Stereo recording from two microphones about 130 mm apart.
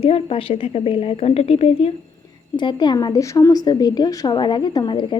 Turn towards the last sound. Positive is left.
turn(degrees=35)  # may be behind; listen again after turning